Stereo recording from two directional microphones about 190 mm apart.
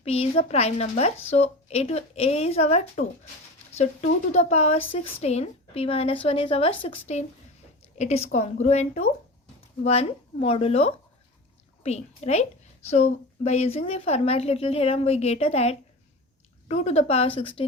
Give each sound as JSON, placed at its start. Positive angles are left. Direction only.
{"t": 0.0, "sound": "a woman's voice", "side_deg": 35}